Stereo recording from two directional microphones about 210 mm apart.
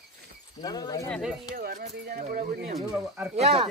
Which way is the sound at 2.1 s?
40° right (ahead or behind).